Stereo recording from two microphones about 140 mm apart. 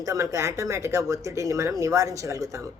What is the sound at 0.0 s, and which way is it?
Speech, 25° right (ahead or behind).